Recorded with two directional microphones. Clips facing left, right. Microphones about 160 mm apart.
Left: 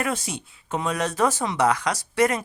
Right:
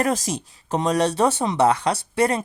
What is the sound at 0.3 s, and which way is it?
Speech, 40° right (ahead or behind).